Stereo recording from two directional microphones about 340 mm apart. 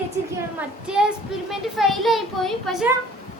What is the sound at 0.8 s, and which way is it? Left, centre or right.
A woman's voice, centre.